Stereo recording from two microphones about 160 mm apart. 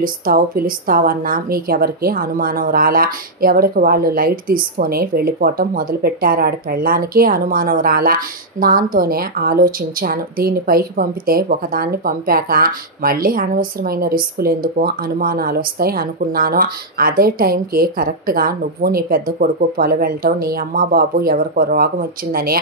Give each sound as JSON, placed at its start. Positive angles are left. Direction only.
{"t": 0.0, "sound": "a woman's voice", "side_deg": -65}